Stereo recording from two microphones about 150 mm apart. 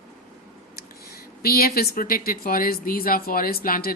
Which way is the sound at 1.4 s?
90° left.